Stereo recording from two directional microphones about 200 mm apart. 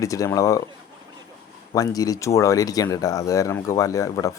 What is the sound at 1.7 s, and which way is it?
Speech, 20° left (ahead or behind).